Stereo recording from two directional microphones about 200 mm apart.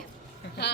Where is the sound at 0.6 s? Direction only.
55° left (ahead or behind).